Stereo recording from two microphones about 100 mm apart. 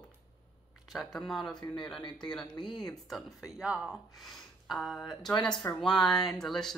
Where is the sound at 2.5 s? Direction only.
50° left (ahead or behind).